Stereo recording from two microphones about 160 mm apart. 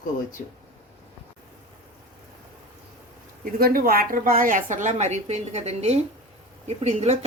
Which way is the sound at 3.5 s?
65° right (ahead or behind).